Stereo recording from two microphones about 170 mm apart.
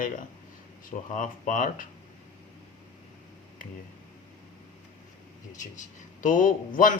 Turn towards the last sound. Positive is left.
turn(degrees=50)  # may be behind; listen again after turning